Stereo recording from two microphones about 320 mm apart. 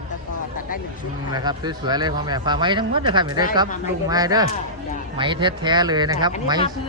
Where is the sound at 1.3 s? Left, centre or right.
Centre.